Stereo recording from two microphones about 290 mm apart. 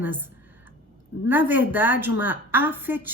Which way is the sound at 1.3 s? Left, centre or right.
Centre.